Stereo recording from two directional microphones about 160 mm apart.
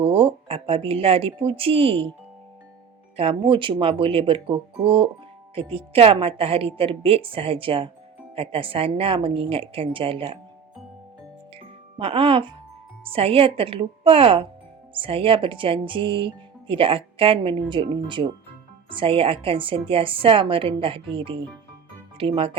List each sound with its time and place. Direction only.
0.0 s speech: 35° right (ahead or behind)
3.2 s speech: 35° right (ahead or behind)
11.5 s music: 35° right (ahead or behind)
13.1 s speech: 35° right (ahead or behind)